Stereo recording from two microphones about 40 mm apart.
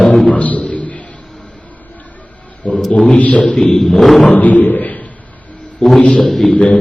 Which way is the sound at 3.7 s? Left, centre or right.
Centre.